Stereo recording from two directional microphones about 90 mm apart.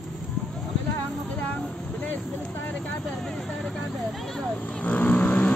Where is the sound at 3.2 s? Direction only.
5° left (ahead or behind).